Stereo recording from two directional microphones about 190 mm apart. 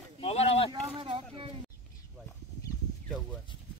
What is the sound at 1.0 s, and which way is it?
Speech, 25° right (ahead or behind).